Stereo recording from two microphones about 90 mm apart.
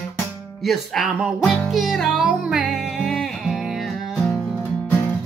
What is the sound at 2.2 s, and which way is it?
Music, 15° right (ahead or behind).